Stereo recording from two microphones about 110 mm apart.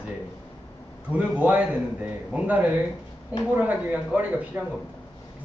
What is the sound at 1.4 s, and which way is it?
Speech, 15° right (ahead or behind).